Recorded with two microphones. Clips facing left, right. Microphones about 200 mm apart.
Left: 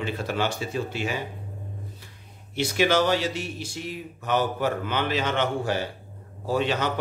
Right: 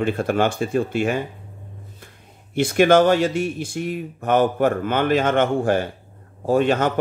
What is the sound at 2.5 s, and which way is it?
Speech, 50° right (ahead or behind).